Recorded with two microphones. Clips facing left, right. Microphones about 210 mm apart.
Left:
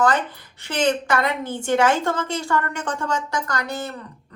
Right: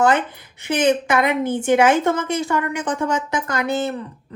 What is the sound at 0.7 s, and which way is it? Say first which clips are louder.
A woman's voice: right 4 dB; 20° right (ahead or behind).